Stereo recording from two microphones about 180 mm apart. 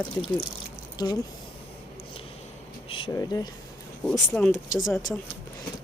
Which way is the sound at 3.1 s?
20° left (ahead or behind).